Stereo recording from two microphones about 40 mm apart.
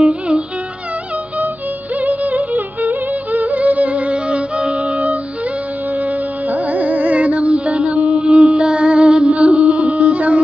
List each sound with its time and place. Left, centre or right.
2.0 s music: right